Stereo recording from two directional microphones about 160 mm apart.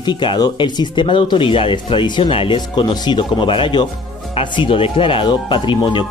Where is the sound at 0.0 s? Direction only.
30° left (ahead or behind).